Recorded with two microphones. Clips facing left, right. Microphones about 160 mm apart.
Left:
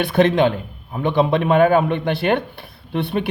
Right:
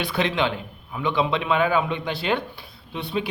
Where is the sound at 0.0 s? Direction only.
55° left (ahead or behind).